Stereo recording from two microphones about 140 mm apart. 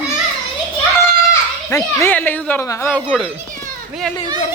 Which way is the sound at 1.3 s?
20° left (ahead or behind).